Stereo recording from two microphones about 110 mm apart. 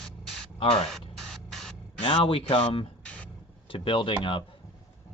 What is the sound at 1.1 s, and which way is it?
Spray, 5° left (ahead or behind).